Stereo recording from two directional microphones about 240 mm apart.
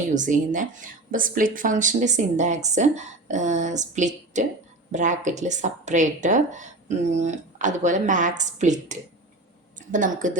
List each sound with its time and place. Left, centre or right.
0.1 s speech: right